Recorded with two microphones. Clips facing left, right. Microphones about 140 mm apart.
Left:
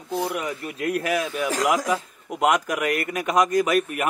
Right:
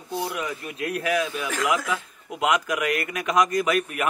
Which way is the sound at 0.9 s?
45° left (ahead or behind).